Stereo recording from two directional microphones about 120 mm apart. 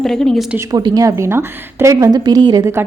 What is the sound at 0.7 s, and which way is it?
A woman's voice, 35° right (ahead or behind).